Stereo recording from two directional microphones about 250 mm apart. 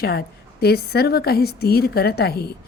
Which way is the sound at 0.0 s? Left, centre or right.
Left.